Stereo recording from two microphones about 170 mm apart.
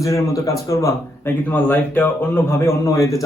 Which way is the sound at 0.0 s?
20° left (ahead or behind).